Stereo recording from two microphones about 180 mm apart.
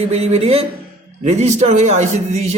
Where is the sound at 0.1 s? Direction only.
35° right (ahead or behind).